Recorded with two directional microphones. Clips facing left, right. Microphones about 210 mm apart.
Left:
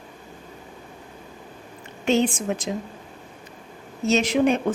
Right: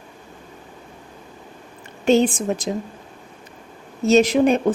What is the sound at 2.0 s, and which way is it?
Speech, 35° right (ahead or behind).